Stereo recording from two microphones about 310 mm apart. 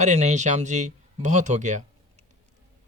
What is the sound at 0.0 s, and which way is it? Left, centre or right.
Speech, right.